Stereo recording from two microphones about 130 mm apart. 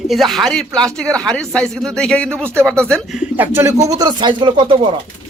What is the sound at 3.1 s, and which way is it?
Speech, 10° right (ahead or behind).